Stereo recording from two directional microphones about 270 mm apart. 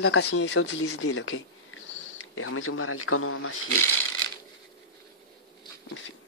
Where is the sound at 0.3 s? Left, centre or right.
Left.